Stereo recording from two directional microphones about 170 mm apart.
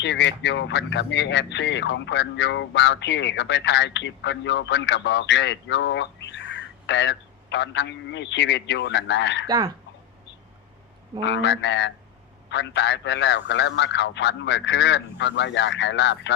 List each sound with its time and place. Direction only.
0.0 s speech: 90° left
9.5 s speech: 25° right (ahead or behind)
11.3 s speech: 90° left